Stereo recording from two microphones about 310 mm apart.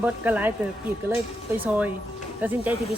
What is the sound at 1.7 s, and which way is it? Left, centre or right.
A woman's voice, centre.